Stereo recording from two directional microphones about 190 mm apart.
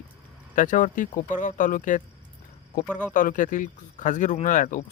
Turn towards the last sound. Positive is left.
turn(degrees=45)  # may be behind; listen again after turning